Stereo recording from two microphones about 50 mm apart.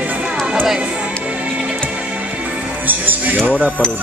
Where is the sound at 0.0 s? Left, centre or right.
Right.